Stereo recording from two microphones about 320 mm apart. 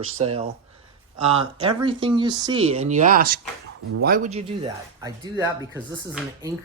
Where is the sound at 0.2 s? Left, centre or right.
Centre.